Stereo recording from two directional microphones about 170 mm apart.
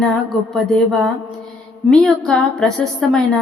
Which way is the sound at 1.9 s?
Centre (ahead or behind).